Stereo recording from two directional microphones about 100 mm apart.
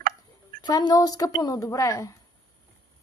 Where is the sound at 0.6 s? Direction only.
45° left (ahead or behind).